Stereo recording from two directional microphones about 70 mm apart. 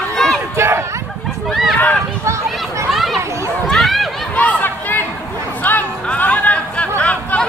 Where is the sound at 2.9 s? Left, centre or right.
Centre.